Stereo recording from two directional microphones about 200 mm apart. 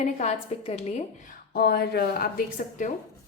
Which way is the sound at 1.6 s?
55° left (ahead or behind).